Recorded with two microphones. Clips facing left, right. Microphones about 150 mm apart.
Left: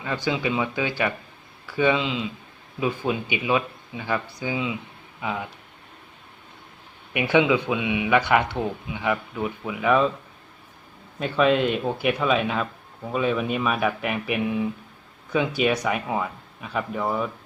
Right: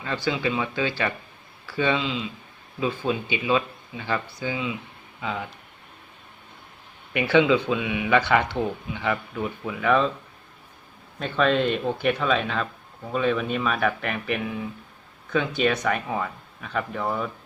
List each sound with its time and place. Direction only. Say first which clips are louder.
0.0 s speech: even; 15° left (ahead or behind)
7.1 s speech: right 1 dB; 15° left (ahead or behind)
11.2 s speech: left 2 dB; 10° left (ahead or behind)